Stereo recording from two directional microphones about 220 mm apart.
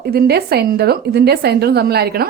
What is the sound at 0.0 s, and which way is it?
A woman's voice, 45° right (ahead or behind).